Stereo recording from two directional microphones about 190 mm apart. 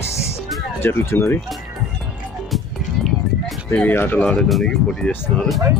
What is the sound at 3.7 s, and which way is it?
Speech, 10° left (ahead or behind).